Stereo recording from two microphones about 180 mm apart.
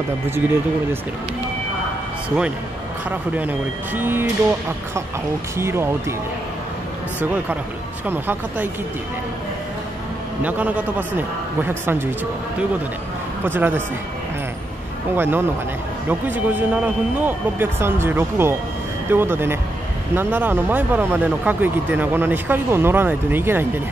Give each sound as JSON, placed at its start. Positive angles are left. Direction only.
{"t": 3.1, "sound": "speech", "side_deg": -10}
{"t": 7.2, "sound": "speech", "side_deg": -10}
{"t": 10.4, "sound": "speech", "side_deg": -10}
{"t": 13.4, "sound": "speech", "side_deg": -10}
{"t": 15.1, "sound": "speech", "side_deg": -10}